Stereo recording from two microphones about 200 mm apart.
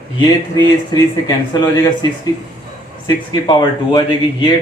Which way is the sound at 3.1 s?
20° left (ahead or behind).